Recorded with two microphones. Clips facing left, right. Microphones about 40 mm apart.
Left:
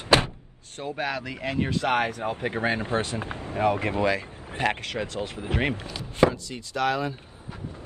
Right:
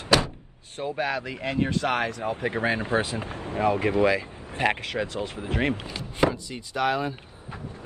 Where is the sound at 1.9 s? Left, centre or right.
Left.